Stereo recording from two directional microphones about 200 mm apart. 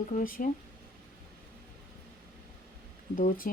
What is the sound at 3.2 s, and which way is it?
Speech, 45° left (ahead or behind).